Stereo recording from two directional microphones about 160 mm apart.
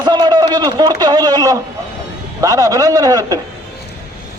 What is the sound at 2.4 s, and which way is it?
A man's voice, 20° right (ahead or behind).